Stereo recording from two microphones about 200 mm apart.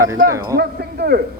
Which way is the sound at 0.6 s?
55° right (ahead or behind).